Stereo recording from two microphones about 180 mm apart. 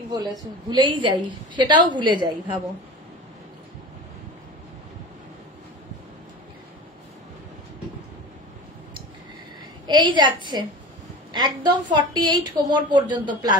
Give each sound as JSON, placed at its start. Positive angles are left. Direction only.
{"t": 0.1, "sound": "a woman's voice", "side_deg": -25}
{"t": 9.8, "sound": "a woman's voice", "side_deg": -25}